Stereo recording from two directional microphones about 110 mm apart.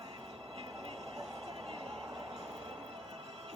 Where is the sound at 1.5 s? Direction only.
55° right (ahead or behind).